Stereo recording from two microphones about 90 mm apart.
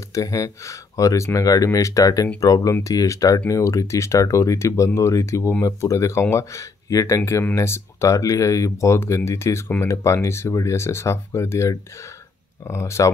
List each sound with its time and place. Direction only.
0.1 s speech: 40° left (ahead or behind)